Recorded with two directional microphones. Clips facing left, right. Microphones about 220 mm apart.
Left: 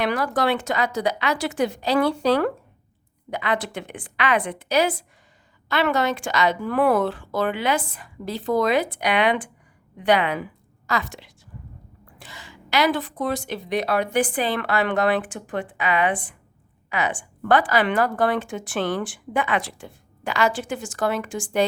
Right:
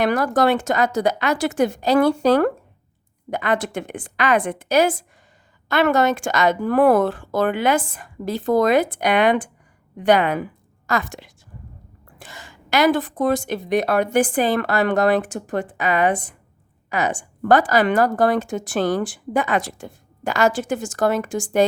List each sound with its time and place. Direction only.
0.0 s a woman's voice: 45° right (ahead or behind)